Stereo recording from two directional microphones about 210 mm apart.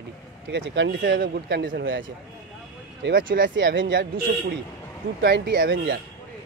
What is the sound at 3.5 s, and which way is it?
Speech, 60° right (ahead or behind).